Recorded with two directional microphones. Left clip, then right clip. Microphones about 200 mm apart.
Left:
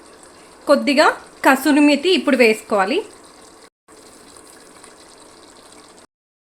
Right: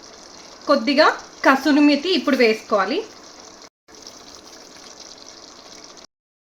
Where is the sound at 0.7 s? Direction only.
25° left (ahead or behind).